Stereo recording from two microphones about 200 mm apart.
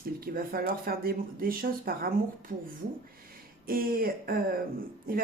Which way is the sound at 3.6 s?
45° right (ahead or behind).